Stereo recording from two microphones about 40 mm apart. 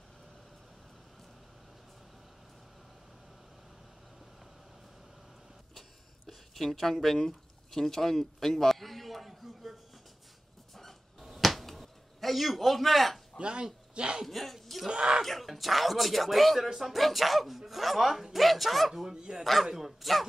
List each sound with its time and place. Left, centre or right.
5.8 s a sound: centre
10.7 s a sound: centre
13.4 s speech: right
14.2 s speech: centre
14.9 s speech: right
15.2 s speech: centre
19.1 s speech: centre
19.4 s speech: centre